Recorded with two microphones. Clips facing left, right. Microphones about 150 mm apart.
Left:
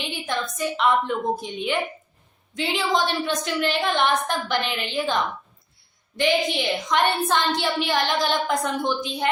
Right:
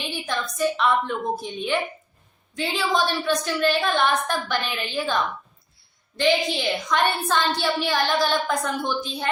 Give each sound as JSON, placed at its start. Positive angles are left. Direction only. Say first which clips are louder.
{"t": 0.3, "sound": "a woman's voice", "louder": "right 3 dB", "side_deg": 20}
{"t": 6.1, "sound": "a woman's voice", "louder": "even", "side_deg": 15}